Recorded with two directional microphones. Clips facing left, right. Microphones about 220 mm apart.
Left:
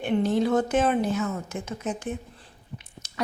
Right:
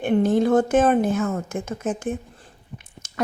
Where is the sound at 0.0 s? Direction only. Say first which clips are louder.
Right 4 dB; 50° right (ahead or behind).